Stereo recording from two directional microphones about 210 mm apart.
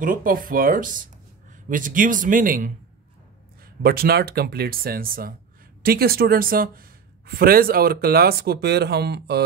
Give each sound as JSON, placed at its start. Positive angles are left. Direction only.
{"t": 0.0, "sound": "speech", "side_deg": -40}
{"t": 3.8, "sound": "speech", "side_deg": -45}